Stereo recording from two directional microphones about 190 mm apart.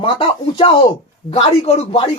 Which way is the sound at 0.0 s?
30° left (ahead or behind).